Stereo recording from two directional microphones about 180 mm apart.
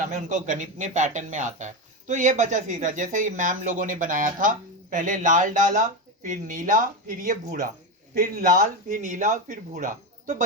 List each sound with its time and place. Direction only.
0.0 s speech: 45° right (ahead or behind)